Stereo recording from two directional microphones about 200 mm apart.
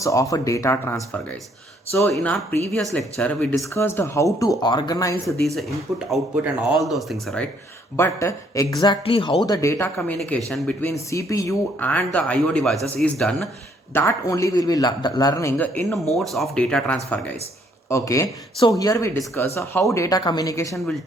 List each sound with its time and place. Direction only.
0.0 s speech: 15° left (ahead or behind)
3.7 s speech: 15° left (ahead or behind)
6.1 s speech: 5° right (ahead or behind)
7.9 s speech: 15° left (ahead or behind)
13.9 s speech: 15° left (ahead or behind)
17.8 s speech: 15° left (ahead or behind)